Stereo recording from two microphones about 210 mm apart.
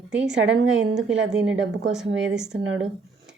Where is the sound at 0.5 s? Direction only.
75° right (ahead or behind).